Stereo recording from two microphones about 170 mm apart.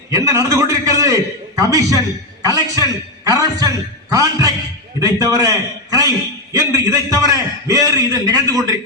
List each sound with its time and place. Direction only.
0.1 s a man's voice: 20° right (ahead or behind)